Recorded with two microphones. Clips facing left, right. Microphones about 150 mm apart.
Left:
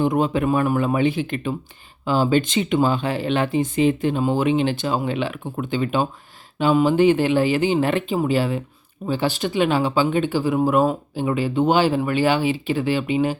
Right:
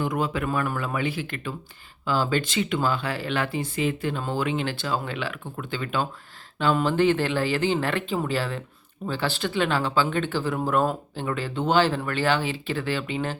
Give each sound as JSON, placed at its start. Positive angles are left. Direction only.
{"t": 0.0, "sound": "speech", "side_deg": 25}